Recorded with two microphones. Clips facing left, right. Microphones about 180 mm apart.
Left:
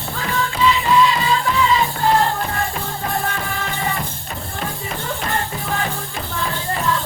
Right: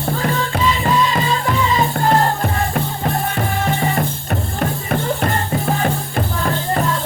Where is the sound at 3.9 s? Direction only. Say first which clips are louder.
Right 7 dB; 55° right (ahead or behind).